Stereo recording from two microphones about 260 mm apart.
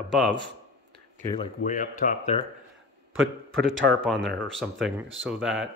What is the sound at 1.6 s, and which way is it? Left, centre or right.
Speech, left.